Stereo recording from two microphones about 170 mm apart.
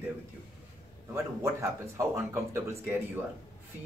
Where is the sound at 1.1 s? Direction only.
15° right (ahead or behind).